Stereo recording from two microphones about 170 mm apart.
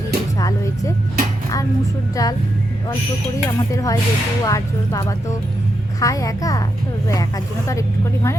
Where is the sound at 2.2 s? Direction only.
20° left (ahead or behind).